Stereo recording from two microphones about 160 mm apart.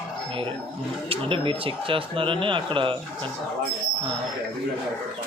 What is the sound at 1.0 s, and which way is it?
Speech, 35° right (ahead or behind).